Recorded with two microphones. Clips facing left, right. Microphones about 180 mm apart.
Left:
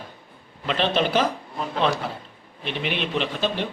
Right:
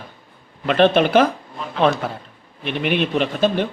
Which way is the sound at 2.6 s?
55° right (ahead or behind).